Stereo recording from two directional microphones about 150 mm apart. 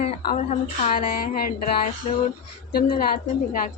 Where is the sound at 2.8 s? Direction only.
75° left (ahead or behind).